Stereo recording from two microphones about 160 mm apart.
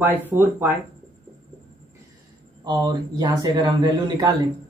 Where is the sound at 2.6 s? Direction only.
25° right (ahead or behind).